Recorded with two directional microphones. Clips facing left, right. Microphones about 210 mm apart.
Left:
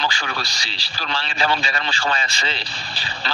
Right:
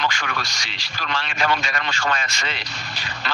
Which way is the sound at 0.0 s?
30° left (ahead or behind).